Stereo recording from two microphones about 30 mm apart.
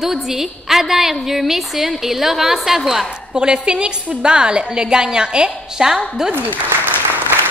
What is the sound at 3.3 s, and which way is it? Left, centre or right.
A woman's voice, right.